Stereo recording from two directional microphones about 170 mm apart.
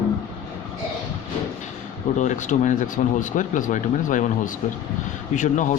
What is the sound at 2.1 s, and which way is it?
Speech, 45° left (ahead or behind).